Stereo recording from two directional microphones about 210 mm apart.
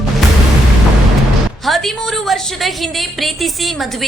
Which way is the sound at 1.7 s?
Centre (ahead or behind).